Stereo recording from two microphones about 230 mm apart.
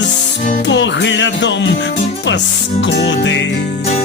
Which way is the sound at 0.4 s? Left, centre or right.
Left.